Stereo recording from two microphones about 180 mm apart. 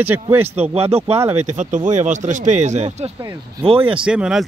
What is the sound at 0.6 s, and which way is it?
Speech, 35° right (ahead or behind).